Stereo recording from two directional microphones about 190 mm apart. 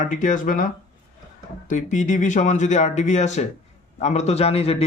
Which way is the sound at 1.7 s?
40° left (ahead or behind).